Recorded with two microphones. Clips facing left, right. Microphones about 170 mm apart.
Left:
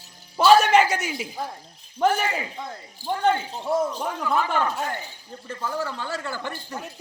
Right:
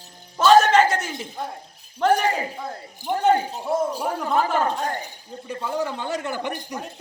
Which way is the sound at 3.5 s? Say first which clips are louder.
Right 1 dB; centre (ahead or behind).